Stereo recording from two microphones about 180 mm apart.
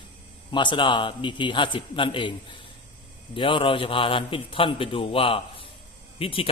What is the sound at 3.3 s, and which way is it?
A man's voice, 30° left (ahead or behind).